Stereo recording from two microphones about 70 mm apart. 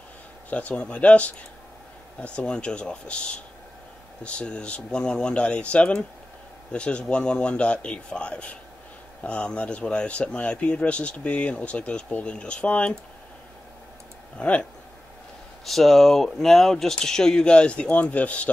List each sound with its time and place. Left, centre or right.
0.5 s speech: centre
14.4 s speech: centre
15.6 s speech: centre